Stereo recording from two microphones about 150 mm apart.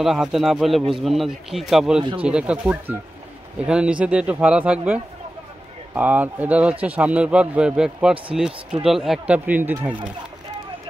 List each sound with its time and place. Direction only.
0.0 s speech: centre (ahead or behind)
2.0 s speech: 35° right (ahead or behind)
2.2 s a man's voice: 5° right (ahead or behind)